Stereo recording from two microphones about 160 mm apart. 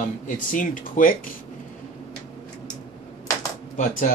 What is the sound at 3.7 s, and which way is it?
Speech, 55° left (ahead or behind).